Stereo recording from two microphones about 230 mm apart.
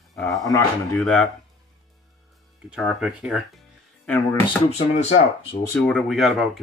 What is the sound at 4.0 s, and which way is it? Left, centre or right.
Speech, centre.